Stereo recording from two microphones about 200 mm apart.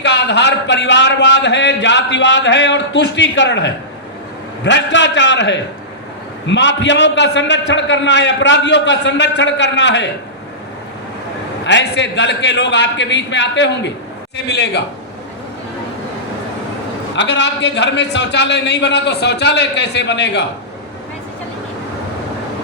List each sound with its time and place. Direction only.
0.0 s a man's voice: 60° left (ahead or behind)
11.6 s a man's voice: 60° left (ahead or behind)
17.2 s a man's voice: 60° left (ahead or behind)